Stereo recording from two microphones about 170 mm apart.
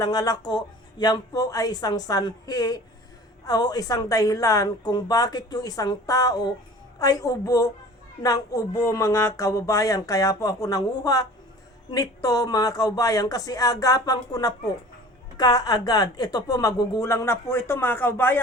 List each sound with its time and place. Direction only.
0.0 s speech: 20° left (ahead or behind)